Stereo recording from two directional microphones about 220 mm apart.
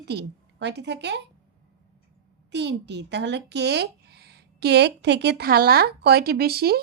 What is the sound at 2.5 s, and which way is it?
Speech, 50° right (ahead or behind).